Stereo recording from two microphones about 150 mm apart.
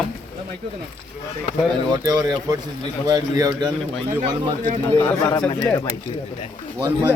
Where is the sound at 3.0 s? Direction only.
25° right (ahead or behind).